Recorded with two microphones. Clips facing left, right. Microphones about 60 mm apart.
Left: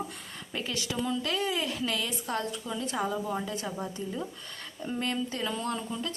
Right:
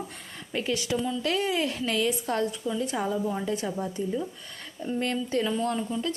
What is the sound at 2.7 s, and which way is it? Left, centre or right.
Speech, right.